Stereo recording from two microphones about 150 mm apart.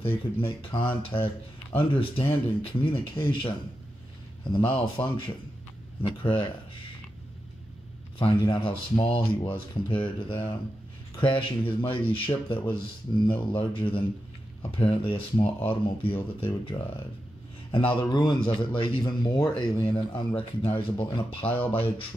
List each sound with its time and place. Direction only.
0.0 s speech: 35° left (ahead or behind)
8.2 s speech: 35° left (ahead or behind)